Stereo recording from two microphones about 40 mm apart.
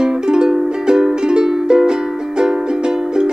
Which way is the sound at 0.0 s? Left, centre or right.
Centre.